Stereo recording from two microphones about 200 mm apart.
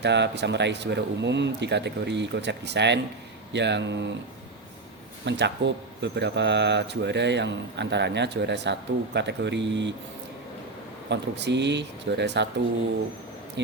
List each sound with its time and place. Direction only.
0.0 s speech: 60° right (ahead or behind)
5.2 s speech: 60° right (ahead or behind)
11.1 s speech: 60° right (ahead or behind)